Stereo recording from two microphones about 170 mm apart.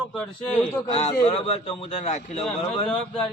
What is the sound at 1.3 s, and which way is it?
A man's voice, 35° left (ahead or behind).